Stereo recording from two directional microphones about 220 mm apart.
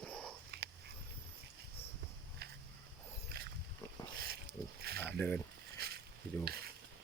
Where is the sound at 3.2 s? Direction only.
45° right (ahead or behind).